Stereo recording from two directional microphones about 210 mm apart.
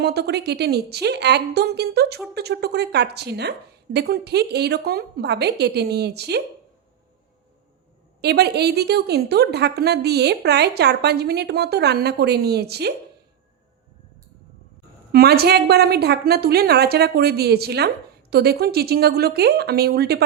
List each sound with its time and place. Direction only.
0.0 s a woman's voice: 50° right (ahead or behind)
8.2 s a woman's voice: 50° right (ahead or behind)
15.1 s a woman's voice: 45° right (ahead or behind)